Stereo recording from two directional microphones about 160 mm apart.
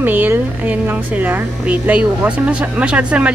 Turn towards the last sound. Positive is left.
turn(degrees=-5)  # may be behind; listen again after turning